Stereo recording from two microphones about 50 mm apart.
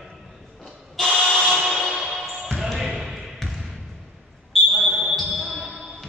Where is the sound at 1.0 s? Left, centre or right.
Centre.